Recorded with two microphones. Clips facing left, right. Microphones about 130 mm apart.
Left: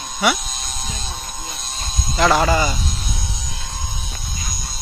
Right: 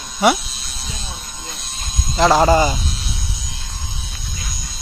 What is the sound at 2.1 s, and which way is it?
Speech, 25° right (ahead or behind).